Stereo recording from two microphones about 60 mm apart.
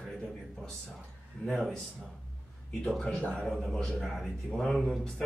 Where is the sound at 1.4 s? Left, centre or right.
Centre.